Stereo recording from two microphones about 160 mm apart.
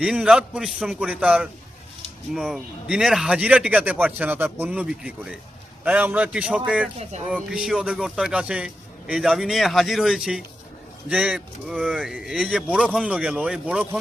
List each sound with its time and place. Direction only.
0.0 s a man's voice: 5° right (ahead or behind)
7.1 s speech: 45° right (ahead or behind)
7.5 s a man's voice: 5° right (ahead or behind)